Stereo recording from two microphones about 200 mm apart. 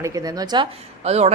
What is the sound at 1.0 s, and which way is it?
Speech, 30° right (ahead or behind).